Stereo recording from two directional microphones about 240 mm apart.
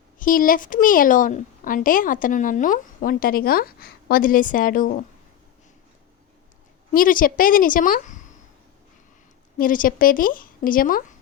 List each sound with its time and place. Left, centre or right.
0.2 s a woman's voice: left
6.9 s a woman's voice: left
9.6 s a woman's voice: left